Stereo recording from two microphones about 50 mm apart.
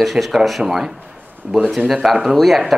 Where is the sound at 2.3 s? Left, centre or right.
Centre.